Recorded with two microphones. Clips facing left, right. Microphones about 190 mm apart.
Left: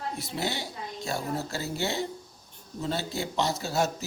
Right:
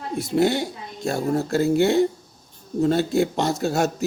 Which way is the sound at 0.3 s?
55° right (ahead or behind).